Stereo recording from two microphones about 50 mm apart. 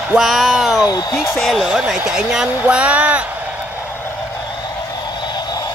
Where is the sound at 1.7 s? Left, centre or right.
Centre.